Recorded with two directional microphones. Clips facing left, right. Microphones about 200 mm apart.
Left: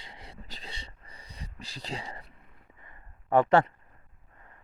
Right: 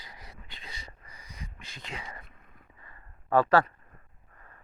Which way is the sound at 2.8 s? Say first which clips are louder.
Even; 20° left (ahead or behind).